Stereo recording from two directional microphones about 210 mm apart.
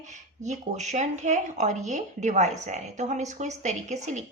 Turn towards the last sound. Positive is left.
turn(degrees=-35)  # may be behind; listen again after turning